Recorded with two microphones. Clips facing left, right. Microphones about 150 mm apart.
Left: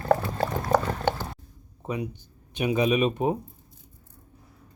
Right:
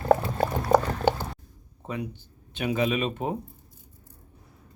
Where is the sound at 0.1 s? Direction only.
15° right (ahead or behind).